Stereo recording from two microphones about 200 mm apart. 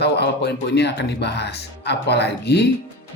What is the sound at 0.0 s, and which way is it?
Speech, 55° left (ahead or behind).